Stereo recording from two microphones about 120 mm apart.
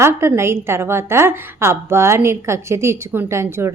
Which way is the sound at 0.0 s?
20° right (ahead or behind).